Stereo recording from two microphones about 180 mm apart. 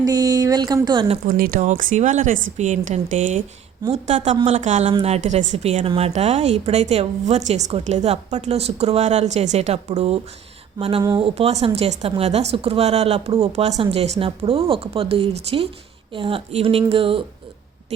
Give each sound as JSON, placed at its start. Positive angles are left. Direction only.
{"t": 0.0, "sound": "speech", "side_deg": -20}
{"t": 1.3, "sound": "a woman's voice", "side_deg": -55}